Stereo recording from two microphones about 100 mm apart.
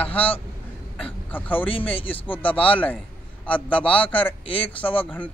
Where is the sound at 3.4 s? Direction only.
15° left (ahead or behind).